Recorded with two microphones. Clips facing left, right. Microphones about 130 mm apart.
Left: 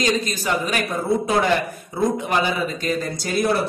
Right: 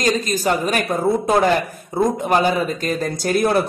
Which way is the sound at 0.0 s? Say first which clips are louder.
Right 3 dB; 45° right (ahead or behind).